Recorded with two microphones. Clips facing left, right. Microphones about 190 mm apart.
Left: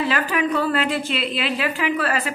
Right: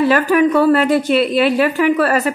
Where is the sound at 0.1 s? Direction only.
50° right (ahead or behind).